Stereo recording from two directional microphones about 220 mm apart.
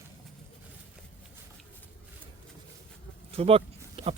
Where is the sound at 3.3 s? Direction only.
25° right (ahead or behind).